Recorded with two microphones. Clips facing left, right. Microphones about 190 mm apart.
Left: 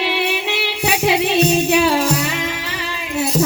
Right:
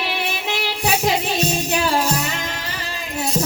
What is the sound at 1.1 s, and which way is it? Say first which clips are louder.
Music: left 5 dB; 70° left (ahead or behind).